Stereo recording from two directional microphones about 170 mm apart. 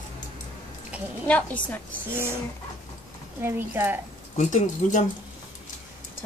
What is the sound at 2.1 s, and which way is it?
Speech, 15° right (ahead or behind).